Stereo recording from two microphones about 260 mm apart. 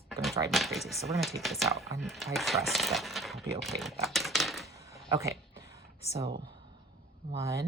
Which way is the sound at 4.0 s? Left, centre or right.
Centre.